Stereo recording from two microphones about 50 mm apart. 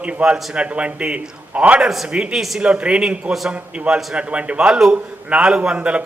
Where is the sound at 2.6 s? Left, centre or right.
Right.